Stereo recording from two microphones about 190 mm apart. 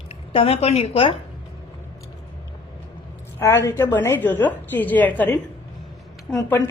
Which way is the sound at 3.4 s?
15° left (ahead or behind).